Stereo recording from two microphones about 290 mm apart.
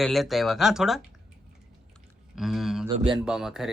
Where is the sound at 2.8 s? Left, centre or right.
Centre.